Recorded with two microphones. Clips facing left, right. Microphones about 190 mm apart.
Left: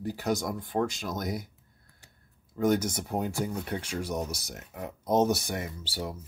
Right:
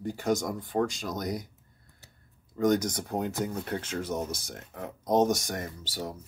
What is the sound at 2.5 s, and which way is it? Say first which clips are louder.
Speech: right 1 dB; 10° left (ahead or behind).